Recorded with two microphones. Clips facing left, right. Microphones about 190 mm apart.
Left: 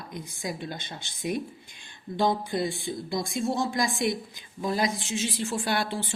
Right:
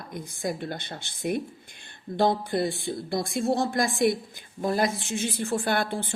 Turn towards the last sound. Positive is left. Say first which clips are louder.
# right 2 dB
turn(degrees=-55)  # may be behind; listen again after turning